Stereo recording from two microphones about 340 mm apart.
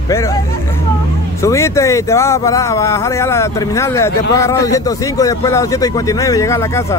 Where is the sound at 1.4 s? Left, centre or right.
Centre.